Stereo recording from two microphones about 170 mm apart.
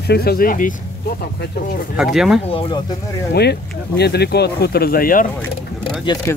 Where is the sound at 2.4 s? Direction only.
30° left (ahead or behind).